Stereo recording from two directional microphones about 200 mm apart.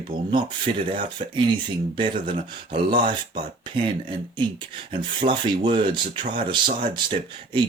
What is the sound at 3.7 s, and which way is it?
Speech, 25° right (ahead or behind).